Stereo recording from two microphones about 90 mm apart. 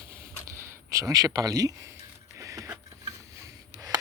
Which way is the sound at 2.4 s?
35° right (ahead or behind).